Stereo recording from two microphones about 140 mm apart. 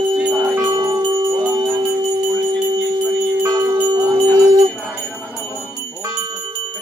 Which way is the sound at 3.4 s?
20° right (ahead or behind).